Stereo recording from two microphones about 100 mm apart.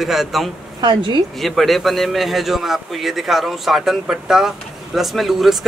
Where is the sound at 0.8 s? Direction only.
50° right (ahead or behind).